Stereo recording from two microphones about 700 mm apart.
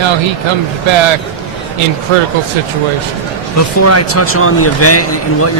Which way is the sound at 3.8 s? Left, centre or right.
Centre.